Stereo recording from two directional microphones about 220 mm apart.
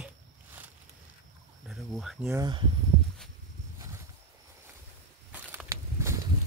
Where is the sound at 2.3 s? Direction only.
20° right (ahead or behind).